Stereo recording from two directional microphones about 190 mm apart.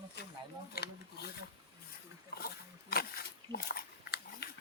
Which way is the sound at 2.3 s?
55° left (ahead or behind).